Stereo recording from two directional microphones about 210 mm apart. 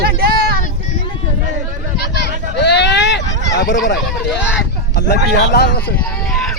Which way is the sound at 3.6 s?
50° left (ahead or behind).